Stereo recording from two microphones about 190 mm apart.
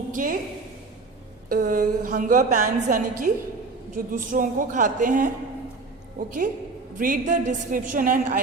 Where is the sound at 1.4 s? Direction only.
50° right (ahead or behind).